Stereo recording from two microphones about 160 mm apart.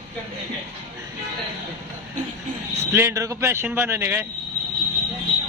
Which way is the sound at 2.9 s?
15° right (ahead or behind).